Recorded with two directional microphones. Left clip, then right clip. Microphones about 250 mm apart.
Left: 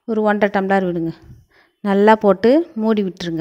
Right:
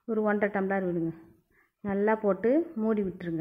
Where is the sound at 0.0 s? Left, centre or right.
Left.